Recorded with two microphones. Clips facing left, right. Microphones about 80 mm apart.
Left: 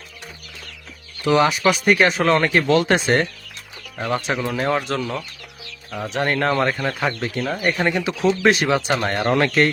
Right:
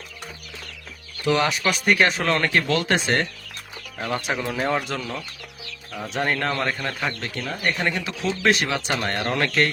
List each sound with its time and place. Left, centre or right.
1.3 s speech: centre
3.9 s speech: centre
6.5 s speech: centre